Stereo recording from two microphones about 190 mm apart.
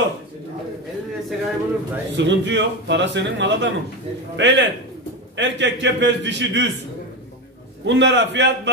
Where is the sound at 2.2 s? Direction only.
70° right (ahead or behind).